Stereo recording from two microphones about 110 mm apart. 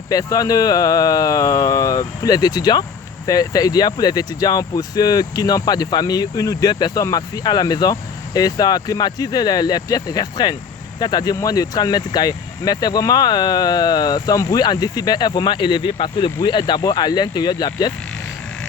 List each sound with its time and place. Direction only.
0.1 s speech: 35° left (ahead or behind)